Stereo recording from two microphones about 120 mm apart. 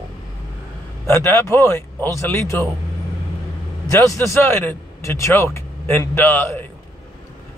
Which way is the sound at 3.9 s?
25° left (ahead or behind).